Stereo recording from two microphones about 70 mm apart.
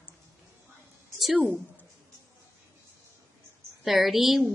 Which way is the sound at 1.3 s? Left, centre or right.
Right.